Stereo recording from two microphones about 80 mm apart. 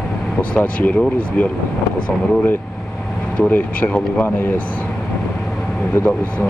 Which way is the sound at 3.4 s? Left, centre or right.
Left.